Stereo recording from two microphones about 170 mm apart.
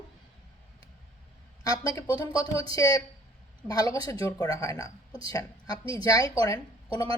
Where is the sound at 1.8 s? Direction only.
20° left (ahead or behind).